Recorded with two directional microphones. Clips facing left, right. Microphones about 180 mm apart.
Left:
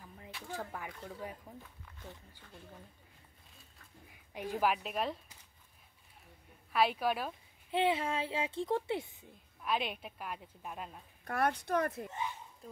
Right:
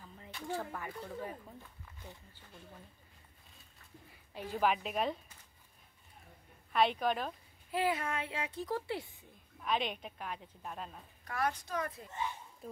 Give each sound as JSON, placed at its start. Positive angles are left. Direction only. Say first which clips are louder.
{"t": 0.0, "sound": "a sound", "louder": "left 1 dB", "side_deg": 10}
{"t": 0.7, "sound": "speech", "louder": "right 2 dB", "side_deg": 10}
{"t": 4.3, "sound": "a woman's voice", "louder": "even", "side_deg": 15}
{"t": 6.7, "sound": "a woman's voice", "louder": "even", "side_deg": 5}
{"t": 7.7, "sound": "speech", "louder": "left 2 dB", "side_deg": 25}
{"t": 9.6, "sound": "a woman's voice", "louder": "even", "side_deg": 5}
{"t": 11.2, "sound": "speech", "louder": "left 3 dB", "side_deg": 55}